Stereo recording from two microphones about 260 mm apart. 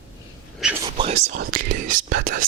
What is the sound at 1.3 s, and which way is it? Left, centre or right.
Speech, right.